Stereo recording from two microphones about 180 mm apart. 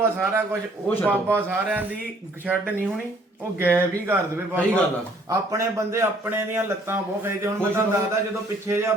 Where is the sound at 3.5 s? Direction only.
10° right (ahead or behind).